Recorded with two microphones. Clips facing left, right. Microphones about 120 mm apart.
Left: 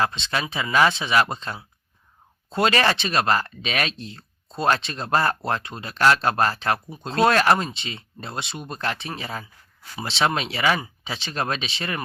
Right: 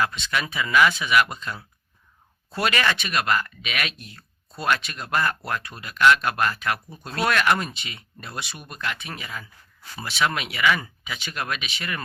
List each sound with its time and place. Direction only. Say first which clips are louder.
0.0 s speech: left 1 dB; 30° left (ahead or behind)